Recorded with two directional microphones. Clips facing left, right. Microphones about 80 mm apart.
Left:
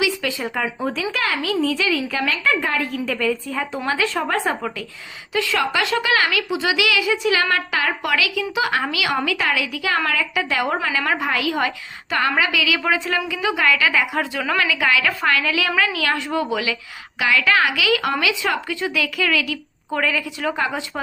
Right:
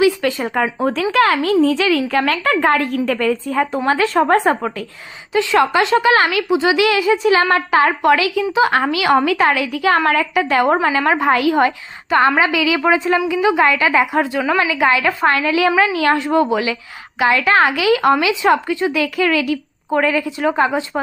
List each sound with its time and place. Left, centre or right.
0.0 s speech: right
0.8 s speech: right
1.1 s a woman's voice: right
1.8 s a woman's voice: right
3.8 s a woman's voice: right
5.3 s a woman's voice: right